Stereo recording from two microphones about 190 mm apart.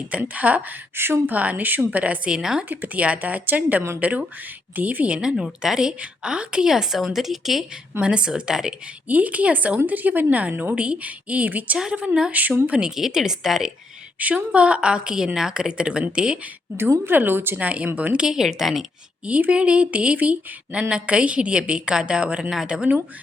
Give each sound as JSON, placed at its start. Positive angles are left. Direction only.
{"t": 0.1, "sound": "a woman's voice", "side_deg": -10}